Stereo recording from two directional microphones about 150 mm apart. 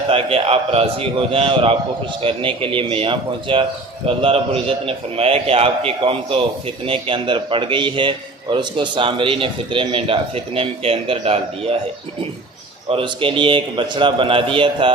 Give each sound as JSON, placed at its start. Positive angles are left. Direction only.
{"t": 0.1, "sound": "a man's voice", "side_deg": -40}
{"t": 12.9, "sound": "a man's voice", "side_deg": -35}